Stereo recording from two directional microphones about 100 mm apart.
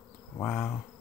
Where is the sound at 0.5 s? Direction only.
25° left (ahead or behind).